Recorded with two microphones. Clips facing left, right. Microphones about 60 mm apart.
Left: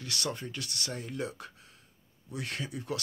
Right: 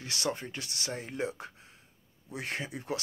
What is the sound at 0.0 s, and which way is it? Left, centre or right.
Speech, right.